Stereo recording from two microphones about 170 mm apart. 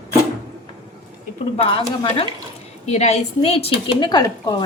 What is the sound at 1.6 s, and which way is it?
Speech, 30° left (ahead or behind).